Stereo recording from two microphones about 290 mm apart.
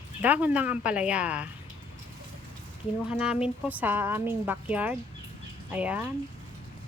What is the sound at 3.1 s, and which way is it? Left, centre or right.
Speech, centre.